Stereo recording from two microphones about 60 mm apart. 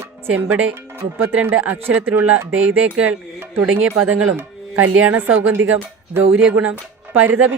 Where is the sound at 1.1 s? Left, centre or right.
Right.